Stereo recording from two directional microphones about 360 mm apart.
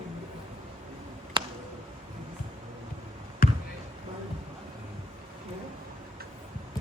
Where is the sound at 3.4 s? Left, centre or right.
Left.